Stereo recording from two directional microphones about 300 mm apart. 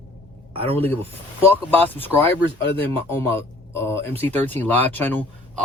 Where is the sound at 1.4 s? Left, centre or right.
Centre.